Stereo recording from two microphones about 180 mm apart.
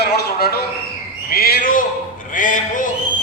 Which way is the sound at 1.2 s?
55° left (ahead or behind).